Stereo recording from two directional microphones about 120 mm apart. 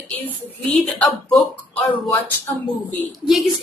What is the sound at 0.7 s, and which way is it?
Speech, 10° left (ahead or behind).